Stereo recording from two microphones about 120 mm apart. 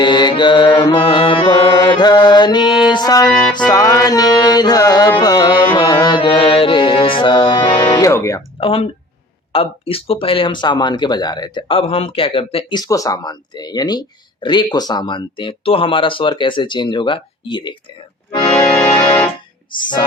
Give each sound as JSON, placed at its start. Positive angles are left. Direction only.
{"t": 0.0, "sound": "speech", "side_deg": 40}
{"t": 0.9, "sound": "music", "side_deg": 45}
{"t": 3.7, "sound": "speech", "side_deg": 30}
{"t": 5.7, "sound": "music", "side_deg": 35}
{"t": 7.7, "sound": "music", "side_deg": 25}
{"t": 8.1, "sound": "speech", "side_deg": 25}
{"t": 8.6, "sound": "speech", "side_deg": 50}
{"t": 11.7, "sound": "speech", "side_deg": 50}
{"t": 12.7, "sound": "speech", "side_deg": 30}
{"t": 18.9, "sound": "music", "side_deg": 35}
{"t": 19.7, "sound": "speech", "side_deg": 40}